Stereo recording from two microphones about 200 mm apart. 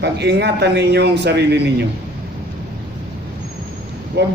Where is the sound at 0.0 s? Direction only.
55° right (ahead or behind).